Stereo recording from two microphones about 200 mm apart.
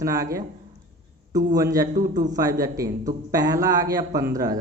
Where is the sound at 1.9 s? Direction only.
40° right (ahead or behind).